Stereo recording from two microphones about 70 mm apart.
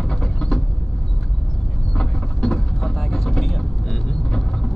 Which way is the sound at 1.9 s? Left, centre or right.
Centre.